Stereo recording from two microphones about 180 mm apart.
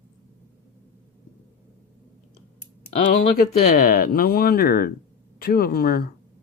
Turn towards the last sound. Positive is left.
turn(degrees=60)  # may be behind; listen again after turning